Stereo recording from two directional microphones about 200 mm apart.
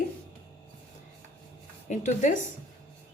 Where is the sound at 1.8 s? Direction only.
40° left (ahead or behind).